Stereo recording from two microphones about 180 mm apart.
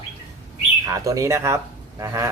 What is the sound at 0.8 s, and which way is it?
Speech, 20° right (ahead or behind).